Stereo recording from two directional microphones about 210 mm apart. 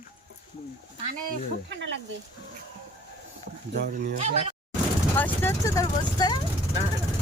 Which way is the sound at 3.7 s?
40° right (ahead or behind).